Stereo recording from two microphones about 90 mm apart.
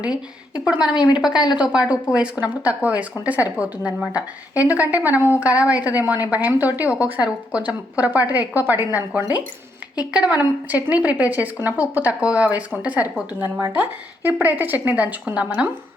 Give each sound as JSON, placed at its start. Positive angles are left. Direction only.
{"t": 0.6, "sound": "a woman's voice", "side_deg": -10}
{"t": 0.9, "sound": "a woman's voice", "side_deg": 55}
{"t": 1.2, "sound": "a woman's voice", "side_deg": -5}
{"t": 10.0, "sound": "a woman's voice", "side_deg": -15}